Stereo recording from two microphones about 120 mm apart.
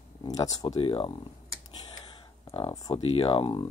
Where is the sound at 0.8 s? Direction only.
45° left (ahead or behind).